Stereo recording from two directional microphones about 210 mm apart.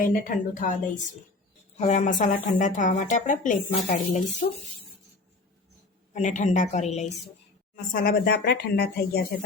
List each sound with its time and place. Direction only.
0.0 s speech: 40° left (ahead or behind)
1.8 s speech: 35° left (ahead or behind)
6.1 s speech: 35° left (ahead or behind)
7.9 s a woman's voice: 50° left (ahead or behind)